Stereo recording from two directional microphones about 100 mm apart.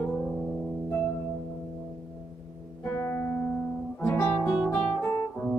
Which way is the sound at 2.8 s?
25° left (ahead or behind).